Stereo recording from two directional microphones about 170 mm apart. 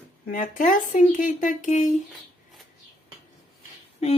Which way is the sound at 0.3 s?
50° left (ahead or behind).